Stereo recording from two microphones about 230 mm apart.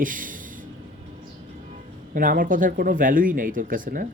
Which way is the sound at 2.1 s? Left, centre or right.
Right.